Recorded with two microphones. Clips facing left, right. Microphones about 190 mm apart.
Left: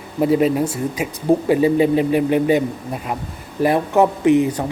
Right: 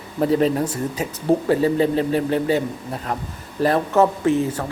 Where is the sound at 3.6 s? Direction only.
15° left (ahead or behind).